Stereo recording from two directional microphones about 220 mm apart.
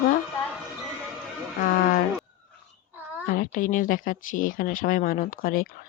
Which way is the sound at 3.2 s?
40° left (ahead or behind).